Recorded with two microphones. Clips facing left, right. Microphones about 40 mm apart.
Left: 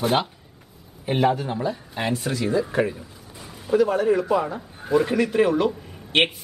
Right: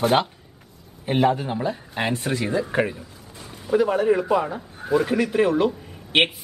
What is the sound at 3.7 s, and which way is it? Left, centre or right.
A man's voice, centre.